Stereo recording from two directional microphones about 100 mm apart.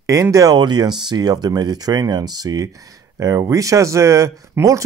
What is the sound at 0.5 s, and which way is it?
Speech, 45° right (ahead or behind).